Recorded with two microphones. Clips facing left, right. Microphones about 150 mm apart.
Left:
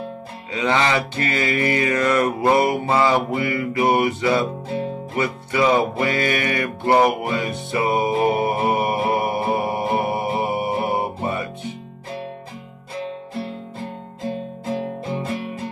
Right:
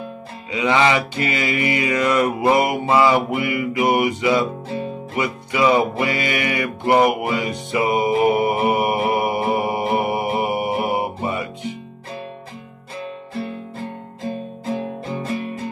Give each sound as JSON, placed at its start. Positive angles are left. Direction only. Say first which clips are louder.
{"t": 0.5, "sound": "music", "louder": "right 2 dB", "side_deg": -15}
{"t": 14.7, "sound": "music", "louder": "even", "side_deg": 25}